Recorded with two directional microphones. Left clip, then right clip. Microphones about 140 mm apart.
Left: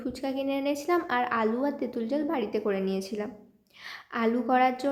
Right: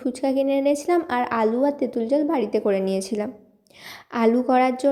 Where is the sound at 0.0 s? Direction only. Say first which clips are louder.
Right 9 dB; 35° right (ahead or behind).